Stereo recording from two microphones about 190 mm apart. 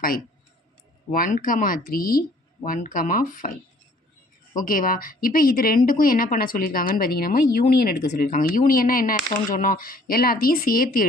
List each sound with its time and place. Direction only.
1.1 s speech: 45° left (ahead or behind)
4.6 s speech: 45° left (ahead or behind)